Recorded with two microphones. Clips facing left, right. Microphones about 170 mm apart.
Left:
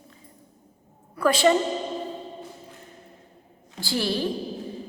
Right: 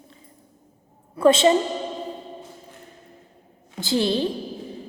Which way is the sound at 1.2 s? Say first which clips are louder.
Right 4 dB; 25° right (ahead or behind).